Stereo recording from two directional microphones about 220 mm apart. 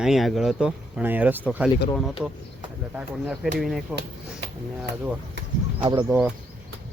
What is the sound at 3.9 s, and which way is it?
Speech, 50° right (ahead or behind).